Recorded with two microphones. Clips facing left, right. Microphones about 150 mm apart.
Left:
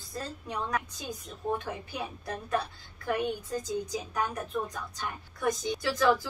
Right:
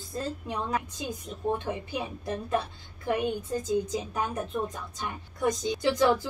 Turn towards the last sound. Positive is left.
turn(degrees=-20)  # may be behind; listen again after turning